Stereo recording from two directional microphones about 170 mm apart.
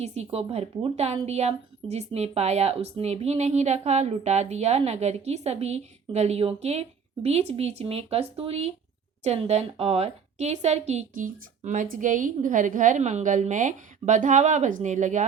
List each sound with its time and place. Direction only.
0.0 s a woman's voice: 40° right (ahead or behind)